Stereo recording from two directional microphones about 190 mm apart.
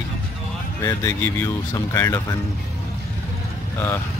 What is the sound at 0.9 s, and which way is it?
Speech, 15° left (ahead or behind).